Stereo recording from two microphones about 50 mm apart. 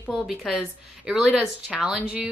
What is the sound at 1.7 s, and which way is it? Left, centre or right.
Speech, right.